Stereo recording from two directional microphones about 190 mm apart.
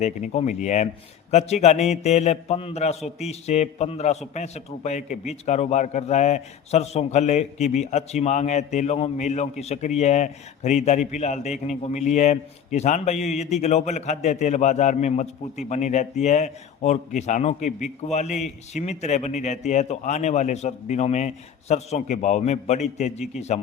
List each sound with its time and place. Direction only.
0.0 s a man's voice: 35° left (ahead or behind)